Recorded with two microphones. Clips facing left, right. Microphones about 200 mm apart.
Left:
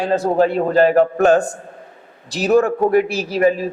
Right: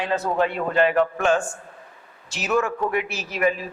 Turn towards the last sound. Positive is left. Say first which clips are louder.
# left 7 dB
turn(degrees=35)  # may be behind; listen again after turning